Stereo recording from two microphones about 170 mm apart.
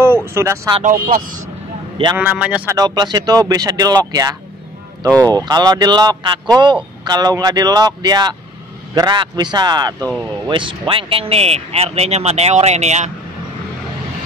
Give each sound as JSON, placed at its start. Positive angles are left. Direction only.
{"t": 0.0, "sound": "speech", "side_deg": -15}
{"t": 0.8, "sound": "speech", "side_deg": -55}
{"t": 2.1, "sound": "speech", "side_deg": -5}
{"t": 2.7, "sound": "speech", "side_deg": -25}